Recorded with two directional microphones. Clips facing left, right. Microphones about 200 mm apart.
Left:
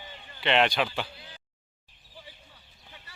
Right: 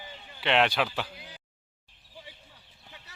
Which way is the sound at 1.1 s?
10° right (ahead or behind).